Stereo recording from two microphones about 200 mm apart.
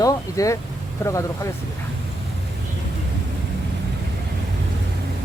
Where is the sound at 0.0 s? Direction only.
15° left (ahead or behind).